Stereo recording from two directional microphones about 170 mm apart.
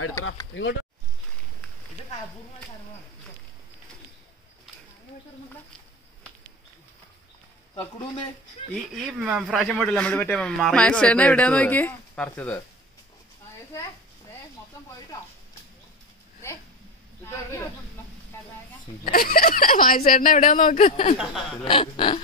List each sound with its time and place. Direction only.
0.5 s speech: 90° left
8.9 s speech: 5° right (ahead or behind)
19.0 s speech: 60° left (ahead or behind); by 21.2 s 40° left (ahead or behind)
21.6 s a sound: 30° left (ahead or behind)